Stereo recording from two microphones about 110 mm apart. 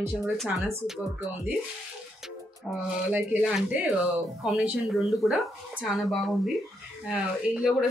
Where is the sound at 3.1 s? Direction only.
10° right (ahead or behind).